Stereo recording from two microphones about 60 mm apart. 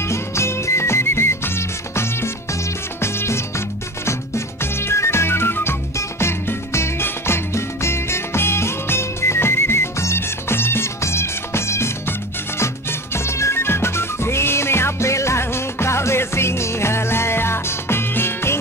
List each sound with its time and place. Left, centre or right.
0.0 s music: left